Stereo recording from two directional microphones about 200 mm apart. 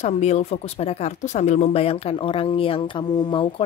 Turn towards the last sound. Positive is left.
turn(degrees=25)  # may be behind; listen again after turning